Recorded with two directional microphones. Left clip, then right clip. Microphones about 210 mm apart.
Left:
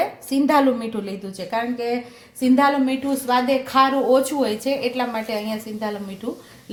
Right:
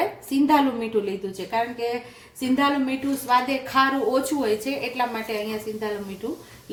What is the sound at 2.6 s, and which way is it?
A woman's voice, 30° left (ahead or behind).